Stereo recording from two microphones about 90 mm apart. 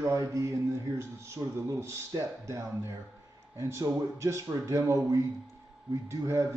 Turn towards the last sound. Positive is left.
turn(degrees=-35)  # may be behind; listen again after turning